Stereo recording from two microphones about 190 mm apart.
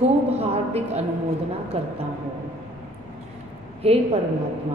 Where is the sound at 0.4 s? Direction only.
35° right (ahead or behind).